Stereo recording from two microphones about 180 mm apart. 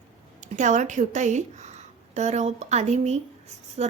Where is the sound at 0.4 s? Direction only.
45° right (ahead or behind).